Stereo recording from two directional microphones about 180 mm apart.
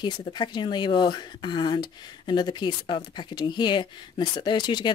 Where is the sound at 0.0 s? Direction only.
25° left (ahead or behind).